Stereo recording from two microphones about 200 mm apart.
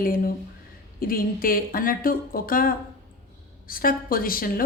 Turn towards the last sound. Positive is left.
turn(degrees=45)  # may be behind; listen again after turning